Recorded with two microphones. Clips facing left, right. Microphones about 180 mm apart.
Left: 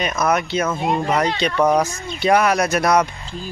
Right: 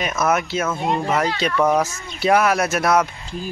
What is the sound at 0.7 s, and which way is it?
Speech, 10° left (ahead or behind).